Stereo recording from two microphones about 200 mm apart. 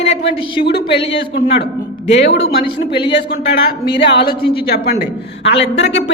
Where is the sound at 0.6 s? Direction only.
55° left (ahead or behind).